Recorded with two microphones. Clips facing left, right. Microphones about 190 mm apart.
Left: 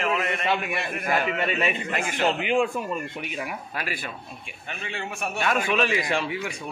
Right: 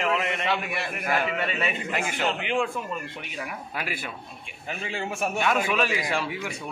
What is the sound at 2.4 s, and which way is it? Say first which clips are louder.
Speech: left 4 dB; 15° left (ahead or behind).